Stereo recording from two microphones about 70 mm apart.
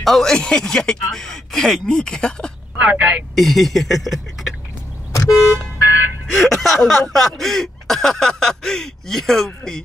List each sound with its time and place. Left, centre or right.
0.0 s speech: centre
2.8 s speech: centre
3.3 s speech: centre
5.1 s car: left
6.3 s speech: centre